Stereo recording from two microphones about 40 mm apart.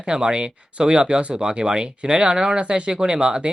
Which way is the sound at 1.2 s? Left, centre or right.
Right.